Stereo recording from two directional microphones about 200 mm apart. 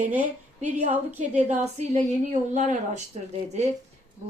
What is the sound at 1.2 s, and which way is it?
Speech, 35° right (ahead or behind).